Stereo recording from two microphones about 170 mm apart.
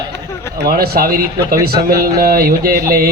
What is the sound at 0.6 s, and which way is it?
A man's voice, 65° right (ahead or behind).